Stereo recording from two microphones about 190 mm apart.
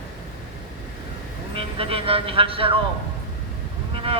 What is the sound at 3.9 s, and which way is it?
Speech, 30° right (ahead or behind).